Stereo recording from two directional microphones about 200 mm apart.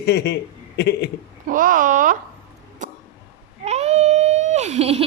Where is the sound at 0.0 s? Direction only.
55° left (ahead or behind).